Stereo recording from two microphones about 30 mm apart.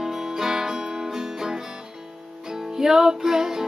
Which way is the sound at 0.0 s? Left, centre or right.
Centre.